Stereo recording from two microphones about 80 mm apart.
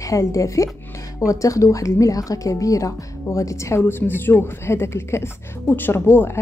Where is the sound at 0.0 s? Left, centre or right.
Left.